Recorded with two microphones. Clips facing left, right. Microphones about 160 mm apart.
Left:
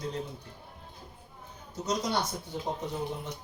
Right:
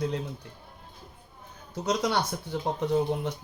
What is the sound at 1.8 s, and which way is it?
Speech, 65° right (ahead or behind).